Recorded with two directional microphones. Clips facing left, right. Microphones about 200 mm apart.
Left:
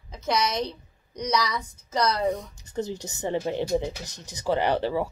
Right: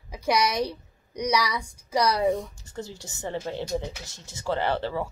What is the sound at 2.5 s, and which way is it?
A woman's voice, 20° left (ahead or behind).